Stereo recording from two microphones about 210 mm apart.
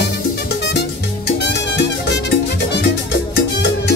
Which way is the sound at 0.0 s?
50° left (ahead or behind).